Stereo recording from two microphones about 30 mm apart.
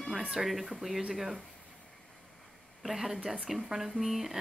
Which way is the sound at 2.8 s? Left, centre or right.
Centre.